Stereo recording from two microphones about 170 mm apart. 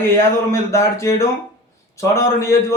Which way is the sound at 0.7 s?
20° left (ahead or behind).